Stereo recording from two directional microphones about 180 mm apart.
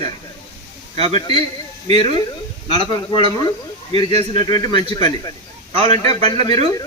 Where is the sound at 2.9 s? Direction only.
25° left (ahead or behind).